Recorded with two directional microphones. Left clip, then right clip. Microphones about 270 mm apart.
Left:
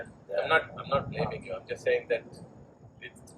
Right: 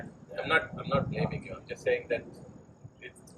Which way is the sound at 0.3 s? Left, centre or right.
Centre.